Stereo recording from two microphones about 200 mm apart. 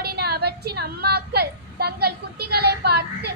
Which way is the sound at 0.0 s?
50° right (ahead or behind).